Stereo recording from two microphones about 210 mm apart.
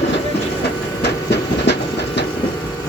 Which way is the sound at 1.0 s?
55° left (ahead or behind).